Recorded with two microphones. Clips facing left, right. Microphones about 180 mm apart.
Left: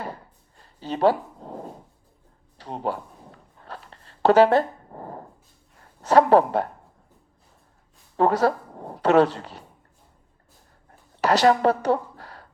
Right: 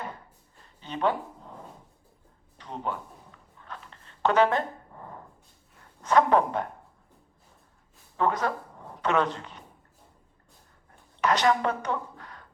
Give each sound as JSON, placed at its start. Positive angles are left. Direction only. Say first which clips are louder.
{"t": 0.0, "sound": "a sound", "louder": "left 4 dB", "side_deg": 35}
{"t": 6.0, "sound": "a woman's voice", "louder": "left 5 dB", "side_deg": 35}
{"t": 8.1, "sound": "speech", "louder": "left 7 dB", "side_deg": 35}
{"t": 11.2, "sound": "a woman's voice", "louder": "left 5 dB", "side_deg": 35}